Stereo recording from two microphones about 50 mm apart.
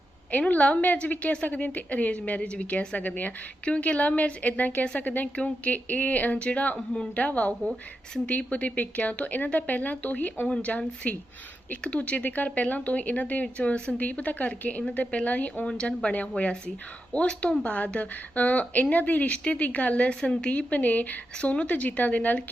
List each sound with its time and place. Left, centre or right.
0.3 s a woman's voice: left
6.7 s speech: centre
7.2 s a woman's voice: left